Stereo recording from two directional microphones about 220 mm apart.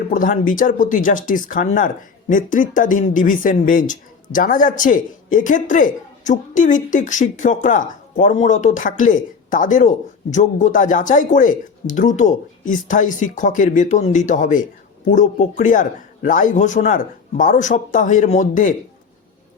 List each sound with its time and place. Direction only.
0.1 s speech: 35° left (ahead or behind)